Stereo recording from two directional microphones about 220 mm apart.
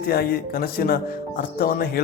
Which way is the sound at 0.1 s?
45° left (ahead or behind).